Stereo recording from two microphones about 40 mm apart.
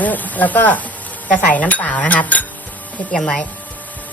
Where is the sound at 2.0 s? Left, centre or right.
Left.